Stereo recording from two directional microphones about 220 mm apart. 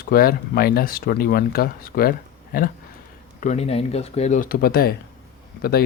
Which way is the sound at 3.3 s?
30° left (ahead or behind).